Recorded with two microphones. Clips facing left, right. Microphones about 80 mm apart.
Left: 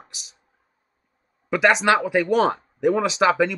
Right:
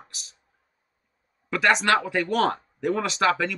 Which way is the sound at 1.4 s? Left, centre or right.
Centre.